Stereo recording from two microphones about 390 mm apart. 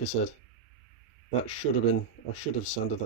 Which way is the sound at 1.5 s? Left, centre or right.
Left.